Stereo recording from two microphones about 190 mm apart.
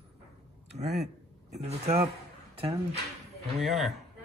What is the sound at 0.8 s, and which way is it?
Speech, 35° right (ahead or behind).